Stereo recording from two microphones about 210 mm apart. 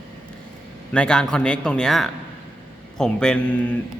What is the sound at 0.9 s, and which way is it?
A man's voice, 5° left (ahead or behind).